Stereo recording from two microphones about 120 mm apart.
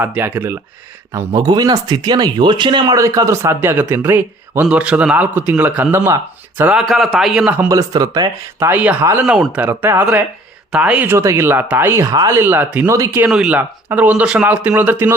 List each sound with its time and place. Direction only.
0.0 s speech: 15° right (ahead or behind)
1.3 s speech: 35° right (ahead or behind); by 6.0 s 15° right (ahead or behind)
6.7 s a man's voice: centre (ahead or behind)
7.4 s speech: 15° right (ahead or behind)
7.7 s speech: 30° right (ahead or behind)
8.5 s speech: 15° right (ahead or behind)
9.0 s speech: 25° right (ahead or behind)
9.2 s a man's voice: 5° right (ahead or behind)
9.6 s speech: 20° right (ahead or behind)